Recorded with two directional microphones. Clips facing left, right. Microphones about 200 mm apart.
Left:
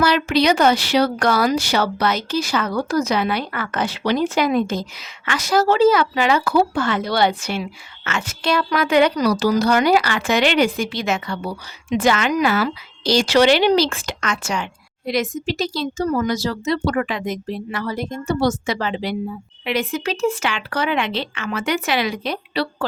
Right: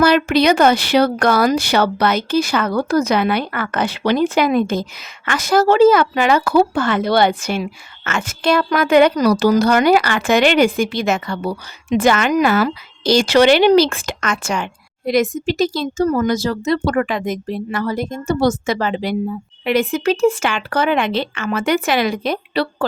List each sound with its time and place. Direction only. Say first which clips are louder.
0.0 s speech: right 4 dB; 50° right (ahead or behind)